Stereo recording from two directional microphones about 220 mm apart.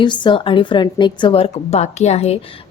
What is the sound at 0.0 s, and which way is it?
A woman's voice, 20° left (ahead or behind).